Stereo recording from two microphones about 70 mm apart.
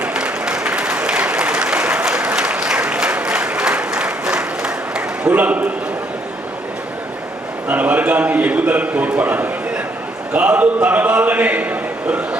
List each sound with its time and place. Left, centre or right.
0.0 s applause: centre
7.7 s a sound: right
10.3 s a man's voice: right